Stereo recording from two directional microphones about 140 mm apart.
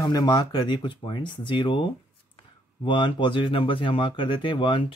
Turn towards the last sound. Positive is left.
turn(degrees=35)  # may be behind; listen again after turning